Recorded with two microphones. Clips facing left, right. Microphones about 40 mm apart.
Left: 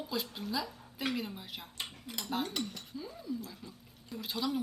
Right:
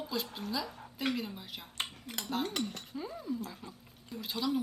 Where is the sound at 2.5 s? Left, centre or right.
Right.